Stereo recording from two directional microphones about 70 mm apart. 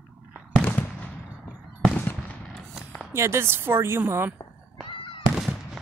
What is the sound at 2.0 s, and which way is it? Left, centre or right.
Fireworks, left.